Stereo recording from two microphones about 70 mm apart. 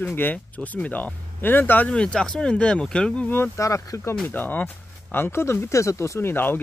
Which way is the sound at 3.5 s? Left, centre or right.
Left.